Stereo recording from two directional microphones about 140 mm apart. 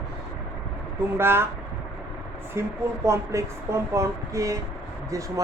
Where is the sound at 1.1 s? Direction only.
15° right (ahead or behind).